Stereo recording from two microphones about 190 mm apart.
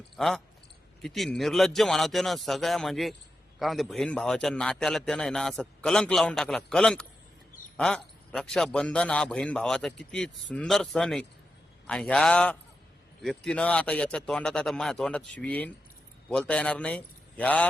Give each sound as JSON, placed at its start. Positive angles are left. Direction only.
{"t": 0.2, "sound": "a man's voice", "side_deg": 0}